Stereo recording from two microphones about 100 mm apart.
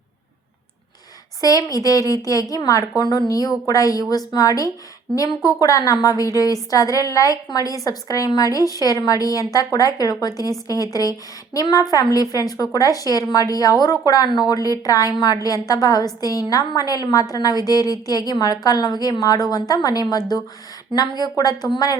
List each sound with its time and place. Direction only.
1.4 s a woman's voice: 35° left (ahead or behind)